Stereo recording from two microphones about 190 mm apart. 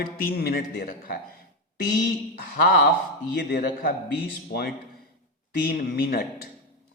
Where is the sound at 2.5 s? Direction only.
50° left (ahead or behind).